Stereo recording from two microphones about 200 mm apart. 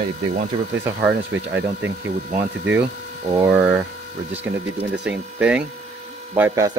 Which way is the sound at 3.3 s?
15° right (ahead or behind).